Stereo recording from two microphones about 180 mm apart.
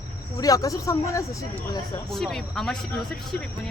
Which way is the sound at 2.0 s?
Centre (ahead or behind).